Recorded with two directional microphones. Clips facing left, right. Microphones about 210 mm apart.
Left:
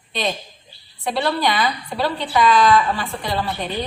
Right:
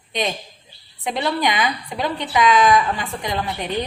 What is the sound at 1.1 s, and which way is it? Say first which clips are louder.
A woman's voice: left 1 dB; 15° right (ahead or behind).